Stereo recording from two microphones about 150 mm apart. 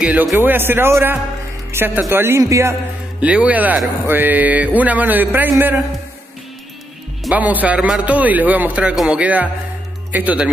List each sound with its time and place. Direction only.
0.0 s speech: 10° right (ahead or behind)
7.2 s speech: 10° right (ahead or behind)